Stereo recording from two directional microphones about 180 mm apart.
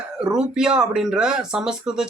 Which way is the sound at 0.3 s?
5° right (ahead or behind).